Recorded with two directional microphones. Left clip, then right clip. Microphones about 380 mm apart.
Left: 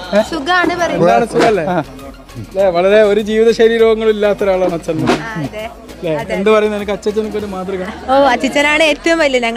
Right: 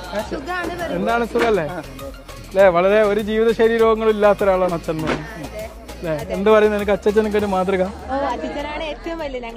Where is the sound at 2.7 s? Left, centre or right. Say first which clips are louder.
Left 6 dB; centre.